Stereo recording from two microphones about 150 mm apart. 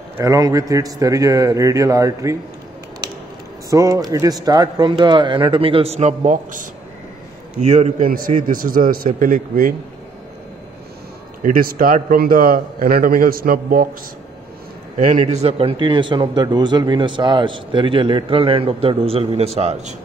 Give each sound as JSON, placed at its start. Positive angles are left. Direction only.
{"t": 0.2, "sound": "a man's voice", "side_deg": -20}
{"t": 3.7, "sound": "a man's voice", "side_deg": -20}
{"t": 11.4, "sound": "a man's voice", "side_deg": -70}
{"t": 15.0, "sound": "a man's voice", "side_deg": -55}